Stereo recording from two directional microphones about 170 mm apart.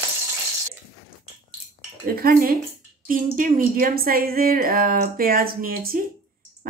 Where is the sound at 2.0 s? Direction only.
60° right (ahead or behind).